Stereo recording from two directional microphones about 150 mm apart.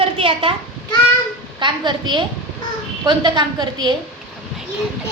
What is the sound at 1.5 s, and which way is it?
A woman's voice, 30° right (ahead or behind).